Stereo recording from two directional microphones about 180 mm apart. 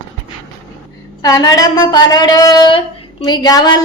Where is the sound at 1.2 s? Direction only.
20° left (ahead or behind).